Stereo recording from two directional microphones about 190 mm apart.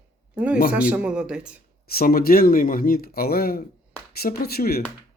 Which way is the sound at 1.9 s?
55° left (ahead or behind).